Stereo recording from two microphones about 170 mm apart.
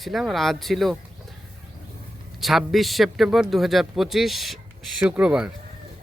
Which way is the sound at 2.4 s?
Centre (ahead or behind).